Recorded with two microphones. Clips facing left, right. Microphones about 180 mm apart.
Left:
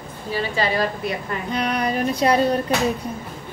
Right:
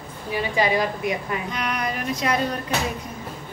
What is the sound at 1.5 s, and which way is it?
Speech, 30° left (ahead or behind).